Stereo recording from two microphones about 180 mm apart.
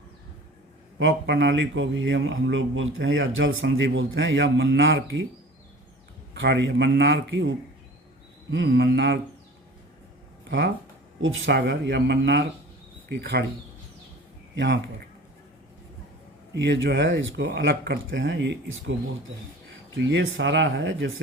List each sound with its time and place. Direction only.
0.9 s speech: 85° right
6.3 s speech: 85° right
11.2 s speech: 90° right; by 13.4 s 70° right (ahead or behind)
14.5 s speech: 75° right (ahead or behind)
16.6 s speech: 80° right
20.1 s speech: 90° right